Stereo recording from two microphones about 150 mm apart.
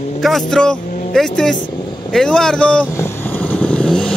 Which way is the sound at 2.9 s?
15° left (ahead or behind).